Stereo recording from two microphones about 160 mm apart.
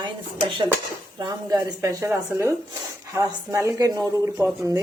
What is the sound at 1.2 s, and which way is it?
Speech, 25° right (ahead or behind).